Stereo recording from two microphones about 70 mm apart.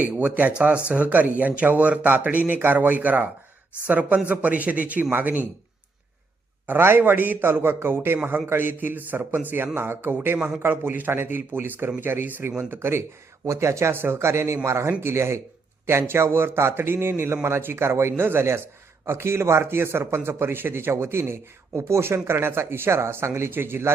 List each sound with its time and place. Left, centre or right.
0.0 s speech: right
6.7 s speech: right